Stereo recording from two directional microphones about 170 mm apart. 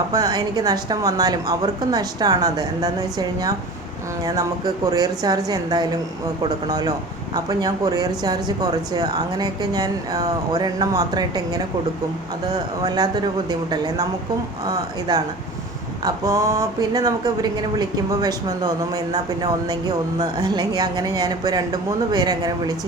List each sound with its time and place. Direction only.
0.1 s speech: 20° right (ahead or behind)
12.8 s speech: 25° right (ahead or behind)